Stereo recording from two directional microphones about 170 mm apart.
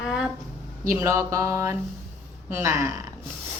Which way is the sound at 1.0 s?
20° right (ahead or behind).